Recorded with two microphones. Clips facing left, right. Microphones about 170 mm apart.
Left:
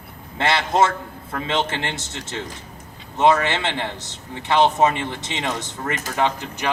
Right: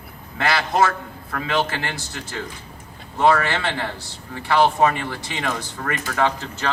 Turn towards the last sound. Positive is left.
turn(degrees=15)  # may be behind; listen again after turning